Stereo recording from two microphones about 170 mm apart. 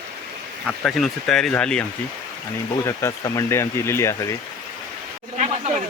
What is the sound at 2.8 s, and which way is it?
Speech, 20° left (ahead or behind).